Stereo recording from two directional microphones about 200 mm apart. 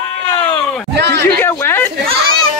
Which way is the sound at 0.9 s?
60° right (ahead or behind).